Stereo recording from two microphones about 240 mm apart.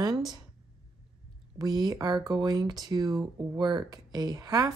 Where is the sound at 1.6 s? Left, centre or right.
Centre.